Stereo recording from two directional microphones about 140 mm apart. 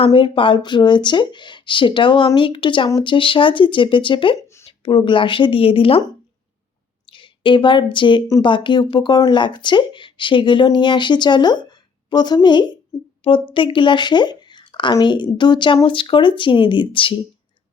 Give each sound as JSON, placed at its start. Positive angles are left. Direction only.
{"t": 0.0, "sound": "speech", "side_deg": 40}
{"t": 7.1, "sound": "a woman's voice", "side_deg": 35}